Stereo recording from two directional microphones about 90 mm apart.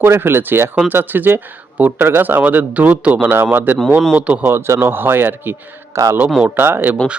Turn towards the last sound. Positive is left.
turn(degrees=-25)  # may be behind; listen again after turning